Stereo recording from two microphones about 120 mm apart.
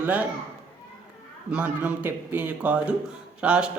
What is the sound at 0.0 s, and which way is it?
Speech, 10° right (ahead or behind).